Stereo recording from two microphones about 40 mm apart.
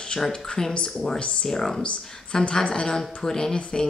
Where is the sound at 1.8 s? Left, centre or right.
Left.